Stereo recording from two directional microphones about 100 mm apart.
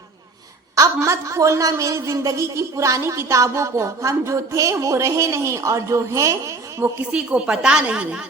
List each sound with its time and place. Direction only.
0.8 s a woman's voice: 30° right (ahead or behind)
7.1 s speech: 10° right (ahead or behind)